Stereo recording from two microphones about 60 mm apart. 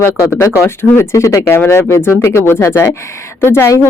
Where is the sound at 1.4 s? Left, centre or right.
Left.